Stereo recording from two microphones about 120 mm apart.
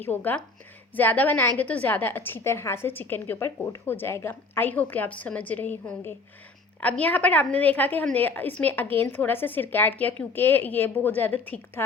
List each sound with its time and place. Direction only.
0.0 s a woman's voice: 15° left (ahead or behind)